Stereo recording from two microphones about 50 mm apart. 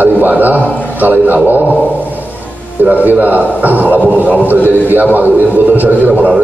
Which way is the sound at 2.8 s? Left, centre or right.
Right.